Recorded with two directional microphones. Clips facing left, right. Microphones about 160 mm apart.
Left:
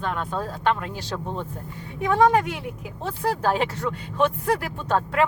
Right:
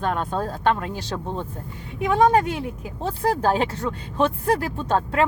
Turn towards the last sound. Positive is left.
turn(degrees=-30)  # may be behind; listen again after turning